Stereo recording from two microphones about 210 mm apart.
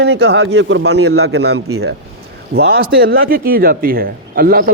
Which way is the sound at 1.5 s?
90° right.